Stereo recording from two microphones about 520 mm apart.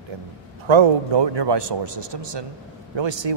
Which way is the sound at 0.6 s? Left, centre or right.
Right.